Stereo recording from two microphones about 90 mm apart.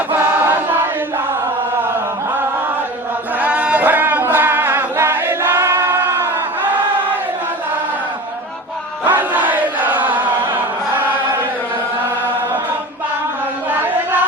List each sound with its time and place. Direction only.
0.1 s choir: 20° right (ahead or behind)
3.4 s singing: 15° right (ahead or behind)
9.0 s chant: 20° right (ahead or behind)
13.7 s a sound: 20° right (ahead or behind)